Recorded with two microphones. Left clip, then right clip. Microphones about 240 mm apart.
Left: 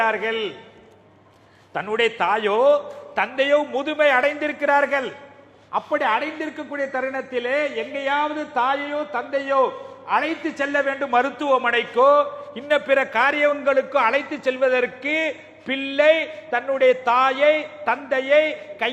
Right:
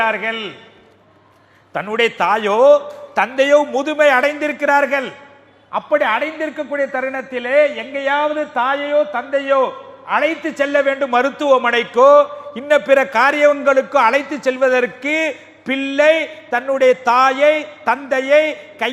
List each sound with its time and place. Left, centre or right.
0.0 s a man's voice: right
1.7 s a man's voice: right